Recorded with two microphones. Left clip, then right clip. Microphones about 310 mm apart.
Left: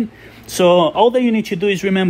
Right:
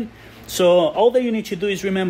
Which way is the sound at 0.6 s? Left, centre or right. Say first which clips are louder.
Left 3 dB; centre.